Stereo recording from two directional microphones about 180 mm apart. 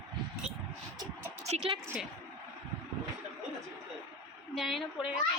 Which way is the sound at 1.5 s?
35° right (ahead or behind).